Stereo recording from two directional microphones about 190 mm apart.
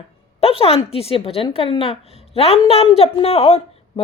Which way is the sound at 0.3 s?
30° left (ahead or behind).